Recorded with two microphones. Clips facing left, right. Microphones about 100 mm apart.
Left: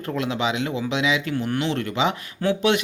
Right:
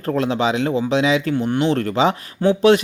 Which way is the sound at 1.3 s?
25° right (ahead or behind).